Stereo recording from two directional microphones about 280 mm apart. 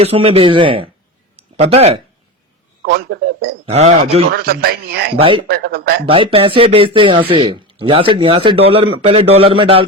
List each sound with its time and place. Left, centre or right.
0.0 s speech: right
2.8 s speech: right
3.7 s speech: right
4.3 s speech: right
5.2 s speech: centre
5.5 s speech: right
6.1 s speech: centre